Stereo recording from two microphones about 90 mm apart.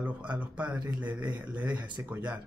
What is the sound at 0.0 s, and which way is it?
Speech, 15° right (ahead or behind).